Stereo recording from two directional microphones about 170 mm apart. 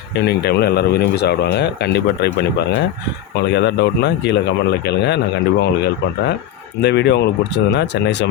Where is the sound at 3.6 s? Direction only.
90° left.